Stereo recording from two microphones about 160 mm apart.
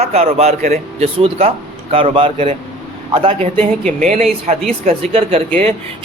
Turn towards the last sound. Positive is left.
turn(degrees=-35)  # may be behind; listen again after turning